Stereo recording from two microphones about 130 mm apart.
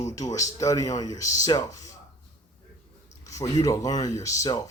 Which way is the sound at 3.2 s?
25° left (ahead or behind).